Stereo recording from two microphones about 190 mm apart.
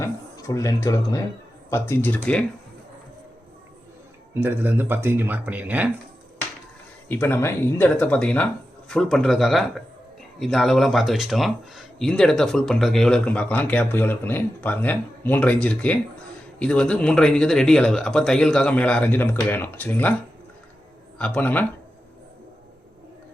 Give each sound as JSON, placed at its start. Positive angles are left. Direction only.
{"t": 0.0, "sound": "speech", "side_deg": 15}
{"t": 4.4, "sound": "speech", "side_deg": -10}
{"t": 7.1, "sound": "speech", "side_deg": 10}
{"t": 21.2, "sound": "speech", "side_deg": 5}